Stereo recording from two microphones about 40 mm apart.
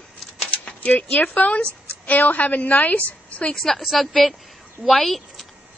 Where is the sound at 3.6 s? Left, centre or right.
Centre.